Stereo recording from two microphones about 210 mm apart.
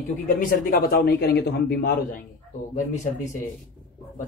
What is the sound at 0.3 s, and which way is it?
A man's voice, 40° left (ahead or behind).